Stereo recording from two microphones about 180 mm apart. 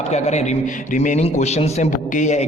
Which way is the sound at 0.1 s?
40° left (ahead or behind).